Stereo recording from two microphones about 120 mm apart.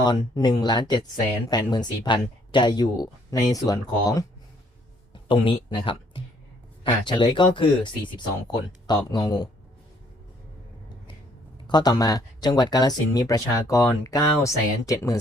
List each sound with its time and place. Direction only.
0.0 s speech: 35° left (ahead or behind)
5.1 s speech: 45° left (ahead or behind)
11.7 s speech: 35° left (ahead or behind)